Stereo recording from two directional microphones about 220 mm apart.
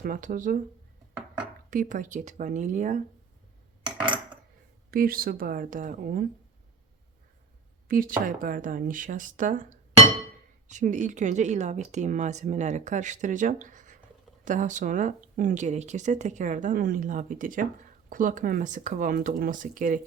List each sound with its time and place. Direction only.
0.0 s speech: 40° right (ahead or behind)
1.7 s speech: 35° right (ahead or behind)
4.0 s cutlery: 20° right (ahead or behind)
4.9 s speech: 40° right (ahead or behind)
7.9 s speech: 40° right (ahead or behind)